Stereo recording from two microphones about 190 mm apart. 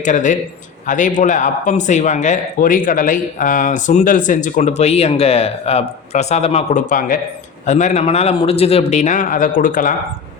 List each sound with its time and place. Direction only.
0.0 s a man's voice: 40° left (ahead or behind)